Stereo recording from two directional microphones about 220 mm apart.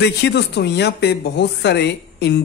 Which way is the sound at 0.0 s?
50° left (ahead or behind).